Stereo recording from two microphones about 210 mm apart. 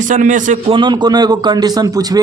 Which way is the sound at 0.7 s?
20° right (ahead or behind).